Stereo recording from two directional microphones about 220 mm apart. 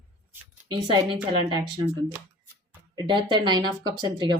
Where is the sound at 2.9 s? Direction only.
20° right (ahead or behind).